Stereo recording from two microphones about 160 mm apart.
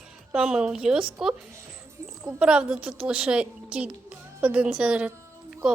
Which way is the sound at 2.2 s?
5° right (ahead or behind).